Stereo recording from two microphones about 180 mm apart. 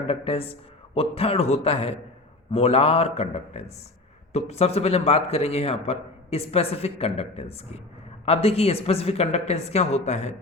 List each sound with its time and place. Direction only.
0.1 s a man's voice: 30° left (ahead or behind)